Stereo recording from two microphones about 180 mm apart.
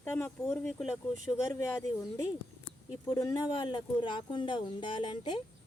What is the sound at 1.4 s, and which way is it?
Speech, 15° left (ahead or behind).